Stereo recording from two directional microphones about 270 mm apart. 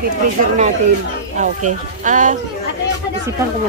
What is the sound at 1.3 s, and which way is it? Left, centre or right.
Speech, right.